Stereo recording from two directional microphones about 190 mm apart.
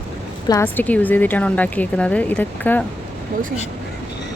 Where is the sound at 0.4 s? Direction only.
15° left (ahead or behind).